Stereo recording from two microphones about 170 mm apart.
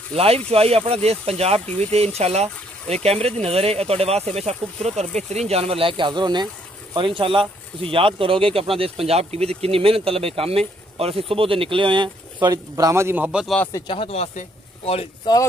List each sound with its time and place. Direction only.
0.1 s speech: 35° right (ahead or behind); by 13.6 s 5° right (ahead or behind)
13.6 s speech: 15° left (ahead or behind)
13.8 s speech: 35° left (ahead or behind)
15.3 s speech: 25° left (ahead or behind)